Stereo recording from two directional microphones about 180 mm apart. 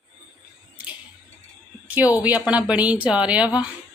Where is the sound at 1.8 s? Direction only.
10° right (ahead or behind).